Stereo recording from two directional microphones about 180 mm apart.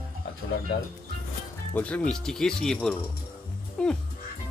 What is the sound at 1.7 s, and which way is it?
Speech, 5° left (ahead or behind).